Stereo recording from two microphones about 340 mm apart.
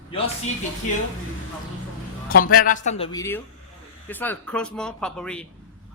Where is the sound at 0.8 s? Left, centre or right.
Left.